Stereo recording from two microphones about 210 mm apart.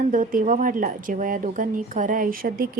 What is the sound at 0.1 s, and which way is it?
A woman's voice, 40° right (ahead or behind).